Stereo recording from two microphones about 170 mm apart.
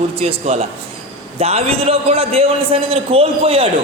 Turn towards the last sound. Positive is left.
turn(degrees=-35)  # may be behind; listen again after turning